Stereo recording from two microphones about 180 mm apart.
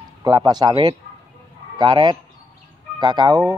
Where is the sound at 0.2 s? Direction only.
25° right (ahead or behind).